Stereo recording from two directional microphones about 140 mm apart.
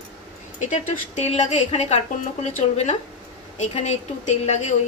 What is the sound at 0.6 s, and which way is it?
A woman's voice, 55° left (ahead or behind).